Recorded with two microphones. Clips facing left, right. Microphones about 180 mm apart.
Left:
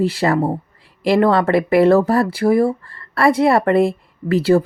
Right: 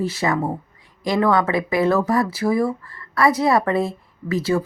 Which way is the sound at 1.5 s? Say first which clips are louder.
Left 6 dB; 65° left (ahead or behind).